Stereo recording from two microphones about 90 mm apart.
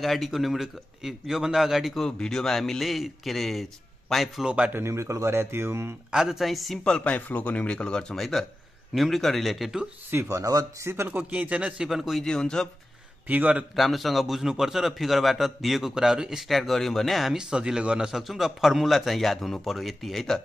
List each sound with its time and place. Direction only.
0.0 s a man's voice: centre (ahead or behind)
4.7 s speech: 30° right (ahead or behind)
6.1 s a man's voice: 5° right (ahead or behind)
6.8 s a man's voice: 15° left (ahead or behind); by 9.8 s centre (ahead or behind)
10.1 s speech: 35° right (ahead or behind)
11.1 s a man's voice: 15° right (ahead or behind); by 12.6 s 10° left (ahead or behind)
13.3 s a man's voice: 15° right (ahead or behind)
13.7 s a man's voice: centre (ahead or behind)